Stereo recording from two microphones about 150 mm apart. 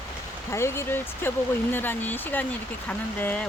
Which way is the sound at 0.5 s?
15° left (ahead or behind).